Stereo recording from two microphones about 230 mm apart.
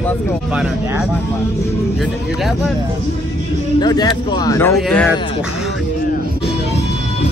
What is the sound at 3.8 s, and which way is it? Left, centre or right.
Speech, centre.